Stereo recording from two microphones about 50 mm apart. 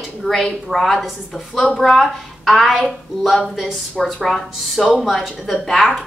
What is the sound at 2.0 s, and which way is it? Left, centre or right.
Speech, centre.